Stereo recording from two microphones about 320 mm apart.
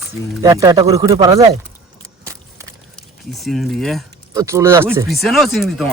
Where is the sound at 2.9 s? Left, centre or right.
Centre.